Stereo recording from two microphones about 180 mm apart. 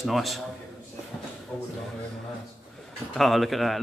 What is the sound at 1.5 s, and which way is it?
Speech, centre (ahead or behind).